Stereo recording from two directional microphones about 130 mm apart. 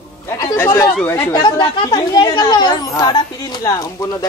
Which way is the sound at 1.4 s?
35° left (ahead or behind).